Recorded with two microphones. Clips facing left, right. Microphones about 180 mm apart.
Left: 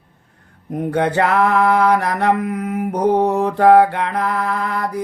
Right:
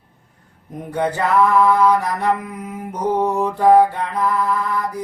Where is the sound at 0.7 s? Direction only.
70° left (ahead or behind).